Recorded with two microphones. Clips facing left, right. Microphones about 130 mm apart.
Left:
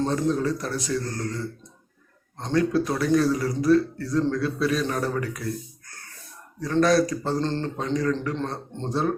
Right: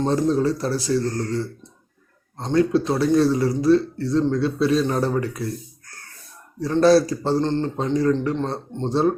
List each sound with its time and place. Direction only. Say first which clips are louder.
0.0 s speech: right 4 dB; 30° right (ahead or behind)
6.6 s speech: right 4 dB; 30° right (ahead or behind)
7.4 s speech: right 4 dB; 20° right (ahead or behind)